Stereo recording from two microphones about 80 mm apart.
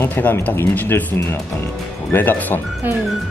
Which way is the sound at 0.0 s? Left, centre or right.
Left.